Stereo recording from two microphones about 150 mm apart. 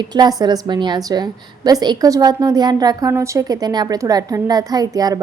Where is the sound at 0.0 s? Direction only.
25° right (ahead or behind).